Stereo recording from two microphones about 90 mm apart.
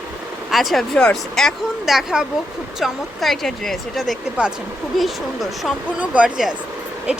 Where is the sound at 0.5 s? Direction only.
Centre (ahead or behind).